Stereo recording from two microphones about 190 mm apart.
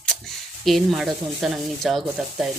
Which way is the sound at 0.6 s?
Centre (ahead or behind).